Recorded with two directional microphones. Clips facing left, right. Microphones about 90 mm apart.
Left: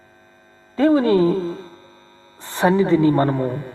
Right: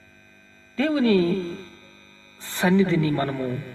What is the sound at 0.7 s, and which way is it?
Music, 30° left (ahead or behind).